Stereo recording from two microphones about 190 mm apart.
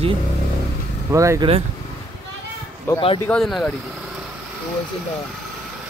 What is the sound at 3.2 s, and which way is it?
Speech, 5° left (ahead or behind).